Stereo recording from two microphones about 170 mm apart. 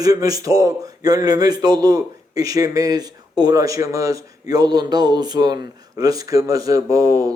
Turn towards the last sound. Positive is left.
turn(degrees=-20)  # may be behind; listen again after turning